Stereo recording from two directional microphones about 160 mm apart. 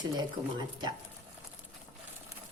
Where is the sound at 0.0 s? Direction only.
25° right (ahead or behind).